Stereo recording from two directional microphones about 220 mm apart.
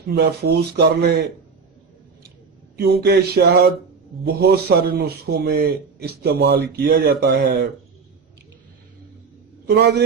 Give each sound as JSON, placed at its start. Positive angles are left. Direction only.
{"t": 0.1, "sound": "a man's voice", "side_deg": -45}
{"t": 2.7, "sound": "a man's voice", "side_deg": -45}
{"t": 9.6, "sound": "a man's voice", "side_deg": -50}